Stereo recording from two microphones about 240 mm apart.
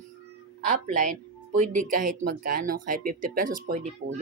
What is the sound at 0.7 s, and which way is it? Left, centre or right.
Speech, right.